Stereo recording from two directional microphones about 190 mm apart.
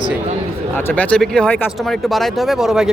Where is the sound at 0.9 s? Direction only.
5° left (ahead or behind).